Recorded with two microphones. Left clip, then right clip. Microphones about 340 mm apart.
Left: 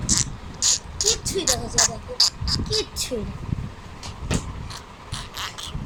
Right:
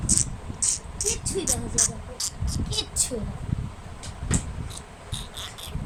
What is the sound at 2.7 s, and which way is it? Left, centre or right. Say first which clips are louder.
Speech: right 1 dB; centre.